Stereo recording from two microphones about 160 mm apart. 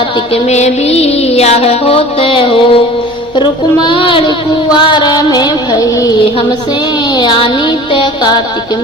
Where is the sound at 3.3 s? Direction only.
30° left (ahead or behind).